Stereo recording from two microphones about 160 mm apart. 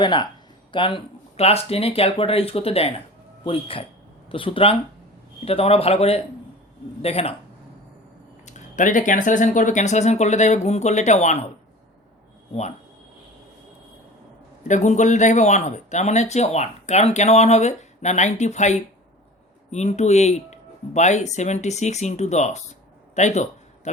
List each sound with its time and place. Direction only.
0.0 s speech: 25° left (ahead or behind)
8.4 s a man's voice: 50° left (ahead or behind)
14.7 s a man's voice: 50° left (ahead or behind)
23.1 s a sound: 45° left (ahead or behind)